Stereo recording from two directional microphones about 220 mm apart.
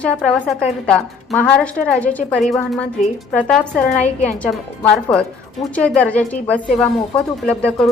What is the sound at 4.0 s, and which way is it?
Speech, 30° left (ahead or behind).